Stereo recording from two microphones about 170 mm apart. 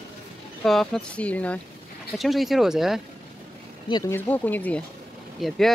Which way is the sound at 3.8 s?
25° left (ahead or behind).